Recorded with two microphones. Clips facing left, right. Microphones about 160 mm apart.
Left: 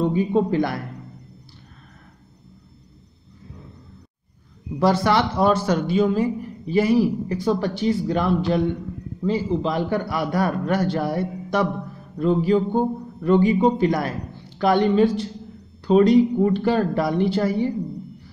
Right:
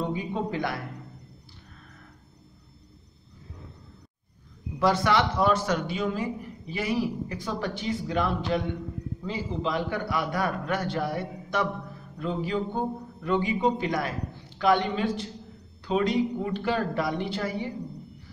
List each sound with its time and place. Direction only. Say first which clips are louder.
0.1 s a man's voice: left 10 dB; 40° left (ahead or behind)
4.7 s a man's voice: left 4 dB; 35° left (ahead or behind)